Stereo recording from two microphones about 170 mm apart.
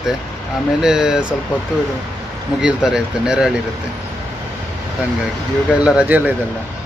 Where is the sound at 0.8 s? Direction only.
5° right (ahead or behind).